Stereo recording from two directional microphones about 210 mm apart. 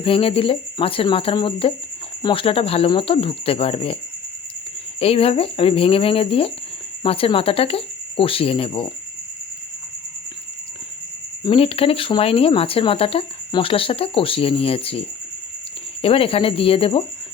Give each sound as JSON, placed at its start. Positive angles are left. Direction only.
{"t": 0.0, "sound": "speech", "side_deg": 25}
{"t": 4.9, "sound": "speech", "side_deg": 25}
{"t": 11.4, "sound": "speech", "side_deg": 25}